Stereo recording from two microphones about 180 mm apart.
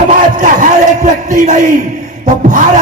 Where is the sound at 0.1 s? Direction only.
45° right (ahead or behind).